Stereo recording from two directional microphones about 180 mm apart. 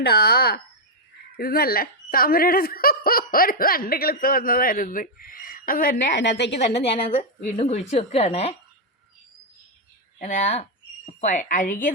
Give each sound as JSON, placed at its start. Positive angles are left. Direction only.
{"t": 0.0, "sound": "speech", "side_deg": 60}
{"t": 6.1, "sound": "a woman's voice", "side_deg": 70}
{"t": 6.7, "sound": "a woman's voice", "side_deg": 35}
{"t": 10.2, "sound": "speech", "side_deg": 40}